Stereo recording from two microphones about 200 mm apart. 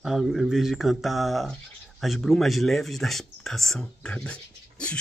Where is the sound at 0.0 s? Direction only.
Centre (ahead or behind).